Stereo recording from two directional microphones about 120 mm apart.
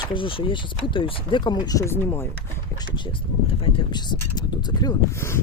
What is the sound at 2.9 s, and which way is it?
Speech, 45° left (ahead or behind).